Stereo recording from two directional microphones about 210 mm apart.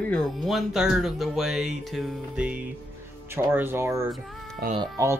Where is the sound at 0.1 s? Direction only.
Centre (ahead or behind).